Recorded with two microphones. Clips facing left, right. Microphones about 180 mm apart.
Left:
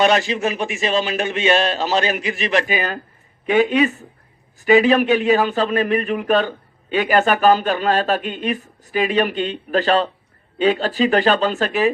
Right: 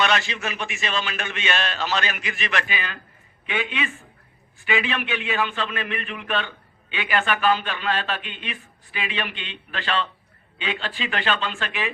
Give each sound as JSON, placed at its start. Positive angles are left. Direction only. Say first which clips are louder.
{"t": 0.0, "sound": "a man's voice", "louder": "left 7 dB", "side_deg": 40}